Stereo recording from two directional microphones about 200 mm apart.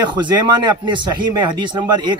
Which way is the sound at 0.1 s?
20° right (ahead or behind).